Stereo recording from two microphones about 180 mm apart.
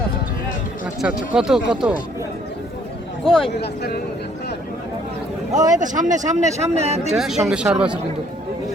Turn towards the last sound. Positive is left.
turn(degrees=-5)  # may be behind; listen again after turning